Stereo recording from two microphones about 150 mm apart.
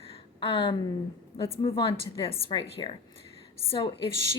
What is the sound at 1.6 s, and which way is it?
Speech, 35° left (ahead or behind).